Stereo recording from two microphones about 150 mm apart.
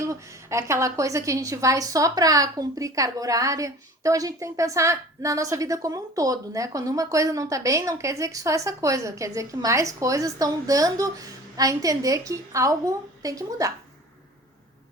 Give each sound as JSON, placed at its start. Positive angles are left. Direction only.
{"t": 0.0, "sound": "a woman's voice", "side_deg": -20}